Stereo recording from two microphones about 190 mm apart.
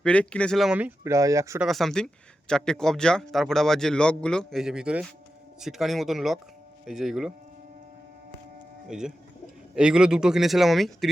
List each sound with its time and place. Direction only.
0.0 s a man's voice: 5° left (ahead or behind); by 1.6 s 15° right (ahead or behind)
1.6 s a man's voice: centre (ahead or behind)
8.9 s a man's voice: 5° right (ahead or behind)